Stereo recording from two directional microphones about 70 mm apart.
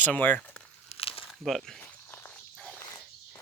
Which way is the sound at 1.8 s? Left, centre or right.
Left.